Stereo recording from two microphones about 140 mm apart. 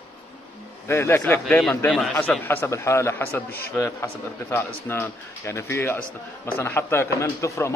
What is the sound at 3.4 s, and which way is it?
Speech, 90° left.